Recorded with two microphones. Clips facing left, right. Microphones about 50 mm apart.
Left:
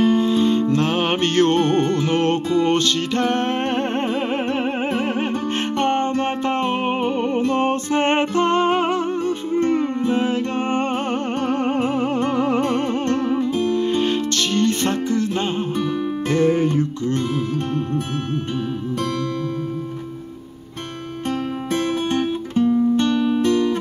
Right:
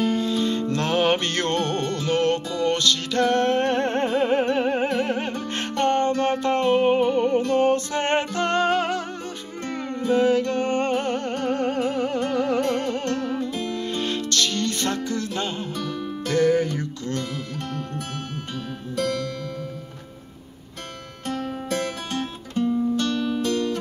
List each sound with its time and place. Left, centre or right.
0.0 s music: left
16.3 s music: left
21.3 s music: left